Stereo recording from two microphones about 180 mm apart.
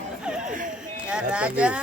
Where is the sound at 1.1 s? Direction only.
5° right (ahead or behind).